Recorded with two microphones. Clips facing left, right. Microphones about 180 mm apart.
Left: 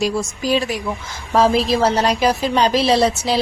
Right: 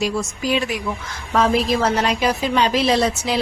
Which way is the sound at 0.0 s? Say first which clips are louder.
Left 2 dB; 35° left (ahead or behind).